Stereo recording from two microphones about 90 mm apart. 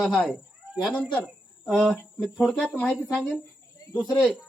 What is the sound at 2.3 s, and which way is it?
Speech, 20° left (ahead or behind).